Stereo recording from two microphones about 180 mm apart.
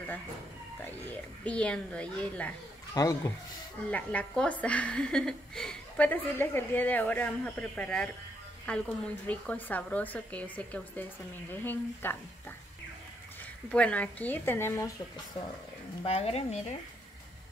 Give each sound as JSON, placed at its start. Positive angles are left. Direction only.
{"t": 1.0, "sound": "a woman's voice", "side_deg": 5}
{"t": 2.9, "sound": "speech", "side_deg": 20}
{"t": 3.9, "sound": "a woman's voice", "side_deg": 10}
{"t": 13.7, "sound": "a woman's voice", "side_deg": 5}
{"t": 16.0, "sound": "speech", "side_deg": 35}